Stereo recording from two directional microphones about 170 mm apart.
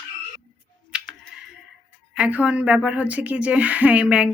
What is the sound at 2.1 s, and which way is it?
A woman's voice, 10° right (ahead or behind).